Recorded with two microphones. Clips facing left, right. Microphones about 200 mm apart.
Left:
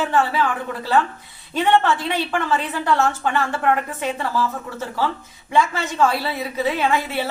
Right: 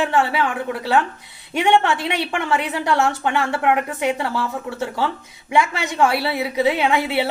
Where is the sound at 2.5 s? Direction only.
70° right (ahead or behind).